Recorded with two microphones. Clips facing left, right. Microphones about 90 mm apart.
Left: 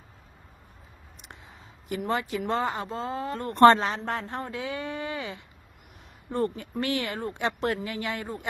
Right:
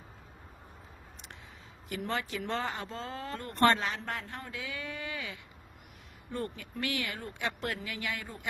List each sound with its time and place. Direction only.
1.9 s speech: 15° left (ahead or behind)
3.4 s speech: 35° left (ahead or behind)